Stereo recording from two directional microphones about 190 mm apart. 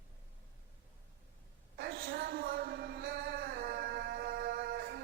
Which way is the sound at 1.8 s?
55° right (ahead or behind).